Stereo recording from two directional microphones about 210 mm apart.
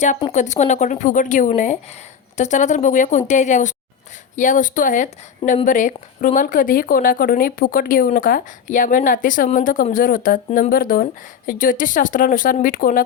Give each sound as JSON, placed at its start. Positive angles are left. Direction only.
{"t": 0.3, "sound": "speech", "side_deg": 35}